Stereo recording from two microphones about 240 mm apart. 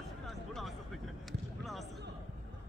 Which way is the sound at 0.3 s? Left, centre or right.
Centre.